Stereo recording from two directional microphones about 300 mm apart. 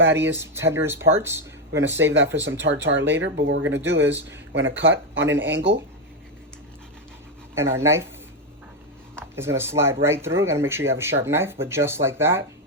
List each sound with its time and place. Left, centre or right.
0.0 s speech: right
0.3 s speech: centre
2.4 s speech: right
7.5 s speech: centre
9.3 s speech: centre